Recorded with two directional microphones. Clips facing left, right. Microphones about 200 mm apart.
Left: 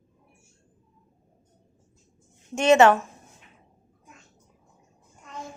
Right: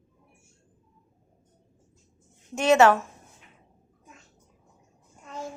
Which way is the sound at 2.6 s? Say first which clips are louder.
Left 2 dB; 5° right (ahead or behind).